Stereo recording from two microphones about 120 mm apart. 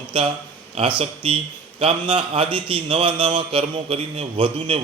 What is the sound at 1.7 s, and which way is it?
A man's voice, 50° right (ahead or behind).